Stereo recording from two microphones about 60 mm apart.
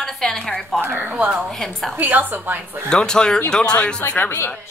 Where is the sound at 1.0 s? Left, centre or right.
Right.